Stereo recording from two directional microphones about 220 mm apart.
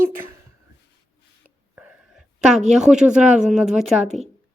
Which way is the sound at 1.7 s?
5° right (ahead or behind).